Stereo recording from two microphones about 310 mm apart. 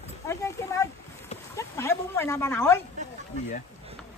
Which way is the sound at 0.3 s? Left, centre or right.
Centre.